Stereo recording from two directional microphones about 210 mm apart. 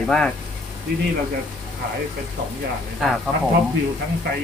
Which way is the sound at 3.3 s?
Centre (ahead or behind).